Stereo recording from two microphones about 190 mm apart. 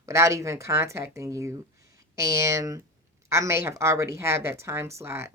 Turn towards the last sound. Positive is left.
turn(degrees=-15)  # may be behind; listen again after turning